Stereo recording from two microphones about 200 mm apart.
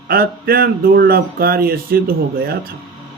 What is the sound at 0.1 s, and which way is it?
Speech, 50° right (ahead or behind).